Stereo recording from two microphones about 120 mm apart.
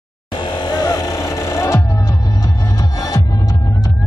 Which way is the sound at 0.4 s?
40° left (ahead or behind).